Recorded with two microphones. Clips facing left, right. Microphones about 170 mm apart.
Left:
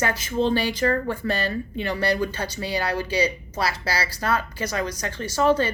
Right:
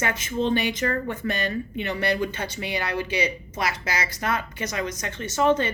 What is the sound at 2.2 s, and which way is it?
Speech, 25° right (ahead or behind).